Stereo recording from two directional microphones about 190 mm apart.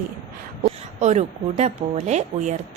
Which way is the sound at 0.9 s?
35° right (ahead or behind).